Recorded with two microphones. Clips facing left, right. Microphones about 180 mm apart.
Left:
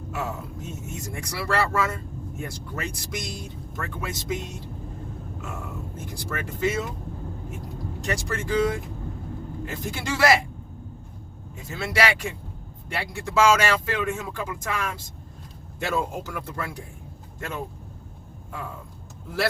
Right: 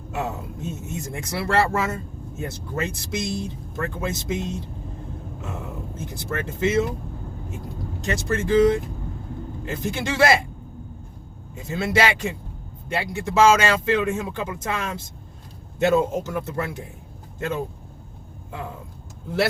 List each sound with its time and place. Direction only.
0.1 s speech: 25° right (ahead or behind)
6.0 s speech: 25° right (ahead or behind)
8.0 s speech: 25° right (ahead or behind)
11.5 s speech: 25° right (ahead or behind)